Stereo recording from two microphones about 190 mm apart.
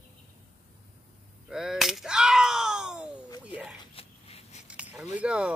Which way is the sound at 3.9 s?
35° left (ahead or behind).